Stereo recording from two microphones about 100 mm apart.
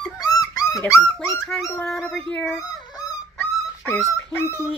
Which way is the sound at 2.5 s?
35° left (ahead or behind).